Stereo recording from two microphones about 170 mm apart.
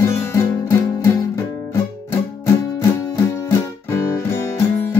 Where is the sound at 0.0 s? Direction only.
15° left (ahead or behind).